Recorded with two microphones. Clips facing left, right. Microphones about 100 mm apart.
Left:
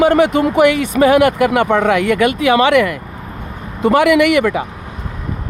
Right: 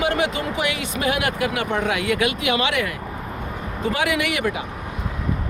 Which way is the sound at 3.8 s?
70° left (ahead or behind).